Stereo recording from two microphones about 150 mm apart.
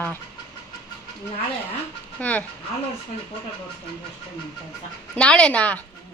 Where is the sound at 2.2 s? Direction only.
10° left (ahead or behind).